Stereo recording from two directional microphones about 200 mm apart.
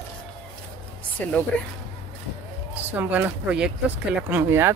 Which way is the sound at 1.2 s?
5° left (ahead or behind).